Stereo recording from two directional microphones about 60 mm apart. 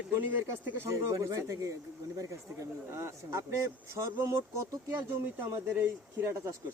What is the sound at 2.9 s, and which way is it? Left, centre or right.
Speech, right.